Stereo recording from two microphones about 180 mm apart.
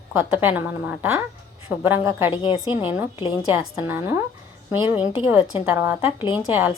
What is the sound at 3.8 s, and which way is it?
A woman's voice, 10° right (ahead or behind).